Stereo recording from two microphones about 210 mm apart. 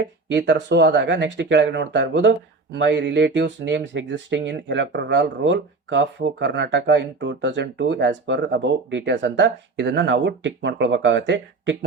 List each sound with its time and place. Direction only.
0.3 s speech: 55° right (ahead or behind)